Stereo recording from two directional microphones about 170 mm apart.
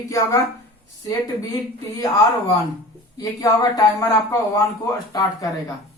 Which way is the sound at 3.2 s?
20° left (ahead or behind).